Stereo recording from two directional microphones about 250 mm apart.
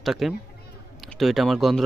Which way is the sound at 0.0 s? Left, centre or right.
Centre.